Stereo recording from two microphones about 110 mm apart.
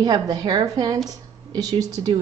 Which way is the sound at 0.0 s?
40° right (ahead or behind).